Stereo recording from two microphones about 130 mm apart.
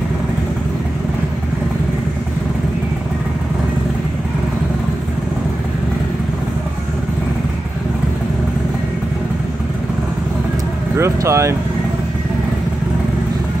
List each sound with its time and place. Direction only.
11.0 s speech: 25° right (ahead or behind)